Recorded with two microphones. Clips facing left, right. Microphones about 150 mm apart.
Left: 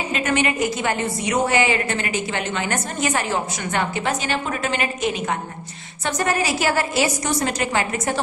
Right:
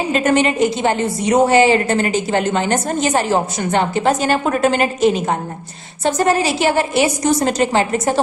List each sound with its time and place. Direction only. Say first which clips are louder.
0.1 s a woman's voice: right 6 dB; 35° right (ahead or behind)
7.2 s a woman's voice: right 7 dB; 40° right (ahead or behind)